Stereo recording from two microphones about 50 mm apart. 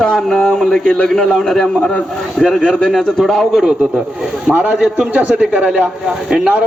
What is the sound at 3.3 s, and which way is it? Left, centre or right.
A man's voice, centre.